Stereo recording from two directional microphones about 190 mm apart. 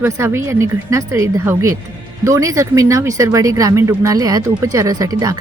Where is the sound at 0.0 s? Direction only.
15° right (ahead or behind).